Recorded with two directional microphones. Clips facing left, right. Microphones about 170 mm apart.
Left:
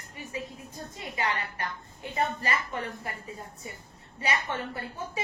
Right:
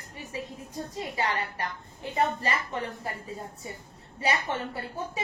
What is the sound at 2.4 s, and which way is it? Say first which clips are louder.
Speech: right 1 dB; 30° right (ahead or behind).